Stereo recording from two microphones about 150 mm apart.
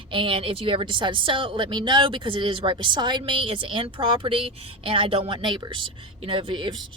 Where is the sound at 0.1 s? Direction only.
35° right (ahead or behind).